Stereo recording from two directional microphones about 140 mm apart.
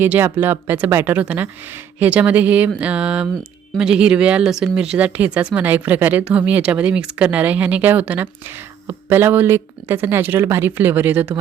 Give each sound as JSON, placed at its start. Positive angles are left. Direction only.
{"t": 0.0, "sound": "speech", "side_deg": -15}